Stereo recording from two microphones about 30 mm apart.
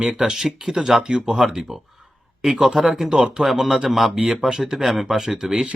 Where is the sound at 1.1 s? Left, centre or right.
Right.